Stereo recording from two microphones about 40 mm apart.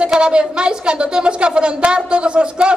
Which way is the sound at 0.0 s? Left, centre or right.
Right.